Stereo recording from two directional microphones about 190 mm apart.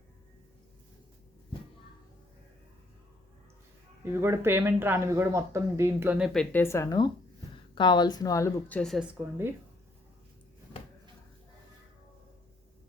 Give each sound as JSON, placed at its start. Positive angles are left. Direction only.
{"t": 4.0, "sound": "speech", "side_deg": -10}